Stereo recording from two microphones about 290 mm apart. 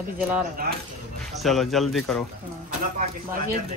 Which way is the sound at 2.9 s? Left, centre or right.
Right.